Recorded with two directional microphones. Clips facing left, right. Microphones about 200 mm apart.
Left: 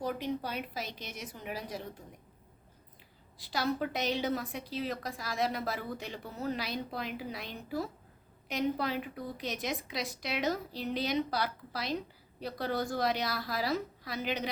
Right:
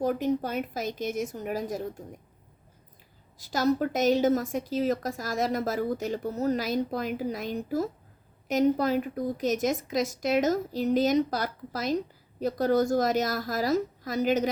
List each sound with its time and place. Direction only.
0.0 s a woman's voice: 45° right (ahead or behind)
3.3 s a woman's voice: 45° right (ahead or behind)